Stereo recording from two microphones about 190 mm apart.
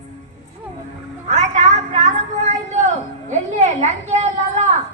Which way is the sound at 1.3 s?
40° right (ahead or behind).